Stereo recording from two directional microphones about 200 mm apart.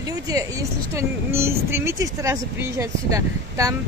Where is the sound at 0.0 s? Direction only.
15° right (ahead or behind).